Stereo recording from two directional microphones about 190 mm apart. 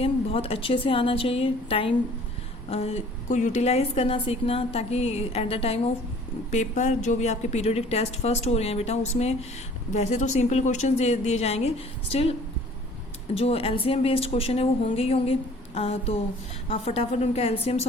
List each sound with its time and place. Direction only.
0.0 s a woman's voice: 30° left (ahead or behind)
13.3 s a woman's voice: 30° left (ahead or behind)